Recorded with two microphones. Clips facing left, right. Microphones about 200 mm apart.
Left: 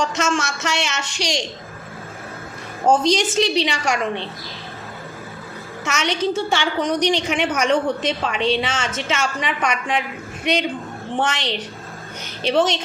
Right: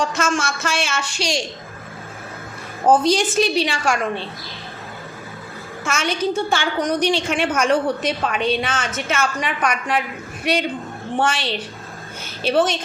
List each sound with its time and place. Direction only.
0.0 s a woman's voice: 25° left (ahead or behind)
3.0 s a woman's voice: 20° left (ahead or behind)
6.0 s a woman's voice: 20° left (ahead or behind)